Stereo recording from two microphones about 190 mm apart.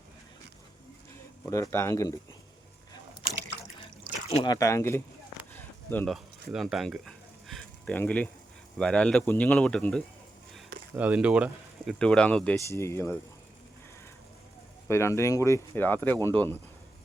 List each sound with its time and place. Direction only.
1.5 s speech: 15° left (ahead or behind)
4.4 s speech: 15° left (ahead or behind)
5.5 s a sound: 10° left (ahead or behind)
6.1 s a sound: centre (ahead or behind)
8.8 s speech: 5° left (ahead or behind)
10.9 s speech: 10° right (ahead or behind)
11.9 s speech: 5° left (ahead or behind)
14.8 s speech: 15° left (ahead or behind)